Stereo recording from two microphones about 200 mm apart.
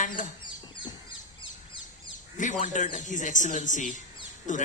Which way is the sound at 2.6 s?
40° left (ahead or behind).